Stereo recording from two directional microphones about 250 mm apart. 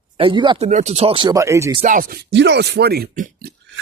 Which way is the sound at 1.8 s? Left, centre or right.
Right.